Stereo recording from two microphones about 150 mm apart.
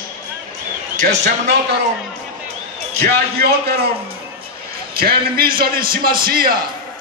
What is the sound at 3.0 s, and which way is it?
Speech, 90° right.